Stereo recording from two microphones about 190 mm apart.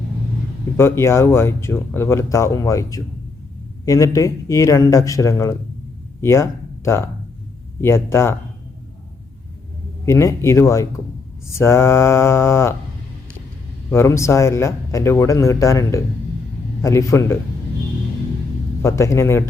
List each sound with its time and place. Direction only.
0.8 s speech: 15° left (ahead or behind)
10.1 s speech: 15° left (ahead or behind)
13.9 s speech: 15° left (ahead or behind)
18.8 s speech: 15° left (ahead or behind)